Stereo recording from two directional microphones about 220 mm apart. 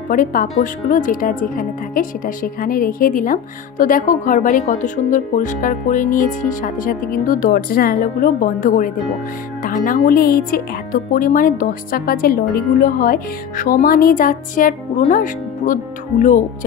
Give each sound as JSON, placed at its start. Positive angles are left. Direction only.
{"t": 0.1, "sound": "speech", "side_deg": 40}